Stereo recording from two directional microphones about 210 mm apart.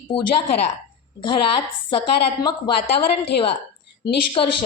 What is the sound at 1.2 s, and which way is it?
A woman's voice, 25° left (ahead or behind).